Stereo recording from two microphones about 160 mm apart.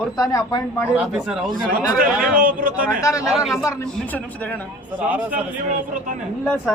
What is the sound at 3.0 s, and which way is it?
Speech, 20° left (ahead or behind).